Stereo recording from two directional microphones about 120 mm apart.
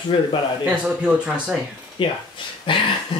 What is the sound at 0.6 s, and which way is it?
Speech, 10° right (ahead or behind).